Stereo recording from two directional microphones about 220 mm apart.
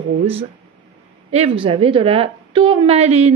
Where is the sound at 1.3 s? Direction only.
25° right (ahead or behind).